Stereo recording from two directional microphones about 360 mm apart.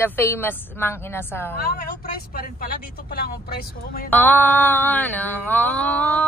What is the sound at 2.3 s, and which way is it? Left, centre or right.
Speech, left.